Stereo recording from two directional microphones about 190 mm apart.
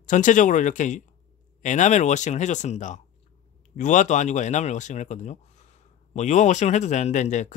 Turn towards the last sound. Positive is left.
turn(degrees=40)  # may be behind; listen again after turning